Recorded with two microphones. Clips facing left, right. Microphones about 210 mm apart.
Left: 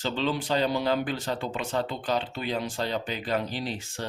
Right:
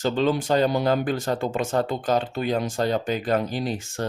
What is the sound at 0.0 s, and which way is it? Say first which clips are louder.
Speech: right 6 dB; 45° right (ahead or behind).